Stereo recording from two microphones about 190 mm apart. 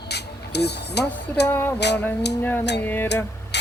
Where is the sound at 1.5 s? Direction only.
10° left (ahead or behind).